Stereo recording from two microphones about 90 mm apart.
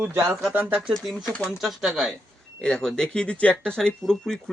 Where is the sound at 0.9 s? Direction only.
Centre (ahead or behind).